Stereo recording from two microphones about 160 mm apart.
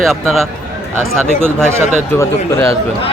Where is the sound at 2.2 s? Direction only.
20° left (ahead or behind).